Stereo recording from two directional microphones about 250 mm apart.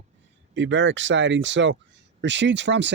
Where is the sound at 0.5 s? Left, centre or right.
Right.